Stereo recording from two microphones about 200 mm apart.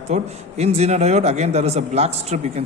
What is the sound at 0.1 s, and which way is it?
A man's voice, 35° right (ahead or behind).